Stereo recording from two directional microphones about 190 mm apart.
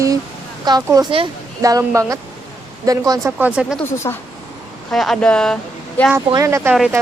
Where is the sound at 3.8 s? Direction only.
10° left (ahead or behind).